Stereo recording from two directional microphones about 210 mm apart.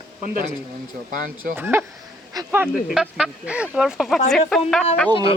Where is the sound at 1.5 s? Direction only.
10° right (ahead or behind).